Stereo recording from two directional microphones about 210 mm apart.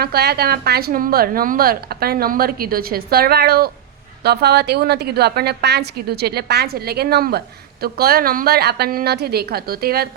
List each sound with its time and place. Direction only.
0.0 s a woman's voice: 50° right (ahead or behind)